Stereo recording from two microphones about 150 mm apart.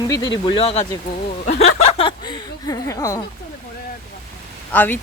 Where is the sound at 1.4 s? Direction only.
50° left (ahead or behind).